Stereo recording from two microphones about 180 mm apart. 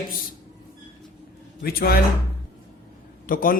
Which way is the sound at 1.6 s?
55° left (ahead or behind).